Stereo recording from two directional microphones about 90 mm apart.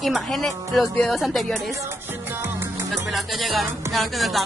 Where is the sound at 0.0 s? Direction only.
Centre (ahead or behind).